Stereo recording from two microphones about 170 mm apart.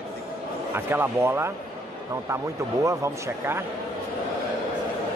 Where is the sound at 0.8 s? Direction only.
15° right (ahead or behind).